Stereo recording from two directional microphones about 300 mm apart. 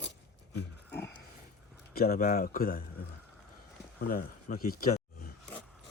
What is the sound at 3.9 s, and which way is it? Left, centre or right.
Speech, left.